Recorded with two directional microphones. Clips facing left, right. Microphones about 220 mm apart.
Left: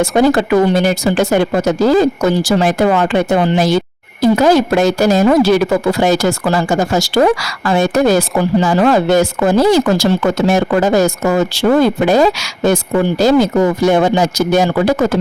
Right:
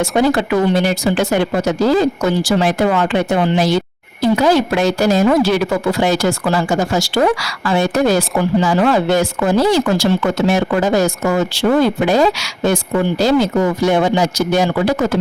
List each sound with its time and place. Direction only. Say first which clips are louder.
0.2 s speech: left 3 dB; 45° left (ahead or behind)